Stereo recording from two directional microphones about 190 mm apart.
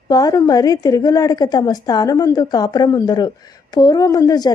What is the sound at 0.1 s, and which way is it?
A woman's voice, 20° left (ahead or behind).